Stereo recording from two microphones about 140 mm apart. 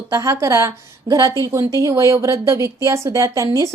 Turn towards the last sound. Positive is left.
turn(degrees=-20)  # may be behind; listen again after turning